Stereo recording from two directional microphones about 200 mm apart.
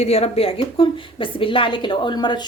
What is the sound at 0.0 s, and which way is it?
A woman's voice, 30° left (ahead or behind).